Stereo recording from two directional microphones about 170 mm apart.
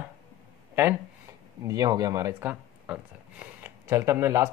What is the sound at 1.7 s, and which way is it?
Speech, 20° right (ahead or behind).